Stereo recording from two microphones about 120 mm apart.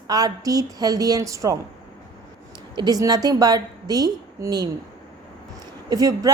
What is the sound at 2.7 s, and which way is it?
A woman's voice, 35° right (ahead or behind).